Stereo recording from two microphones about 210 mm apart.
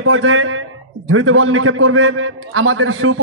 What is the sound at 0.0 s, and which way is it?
A man's voice, 75° right (ahead or behind).